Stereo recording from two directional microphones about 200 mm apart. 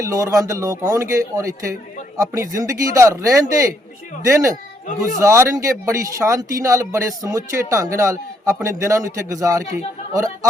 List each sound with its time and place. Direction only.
0.0 s speech: 15° right (ahead or behind)